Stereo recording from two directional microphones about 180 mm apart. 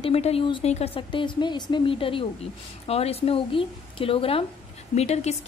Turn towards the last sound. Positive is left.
turn(degrees=35)  # may be behind; listen again after turning